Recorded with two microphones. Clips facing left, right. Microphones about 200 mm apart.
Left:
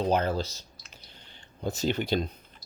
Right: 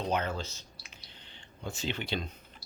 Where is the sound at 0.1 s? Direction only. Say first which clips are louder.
Left 6 dB; 35° left (ahead or behind).